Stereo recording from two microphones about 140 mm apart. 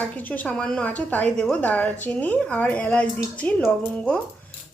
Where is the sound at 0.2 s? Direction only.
10° left (ahead or behind).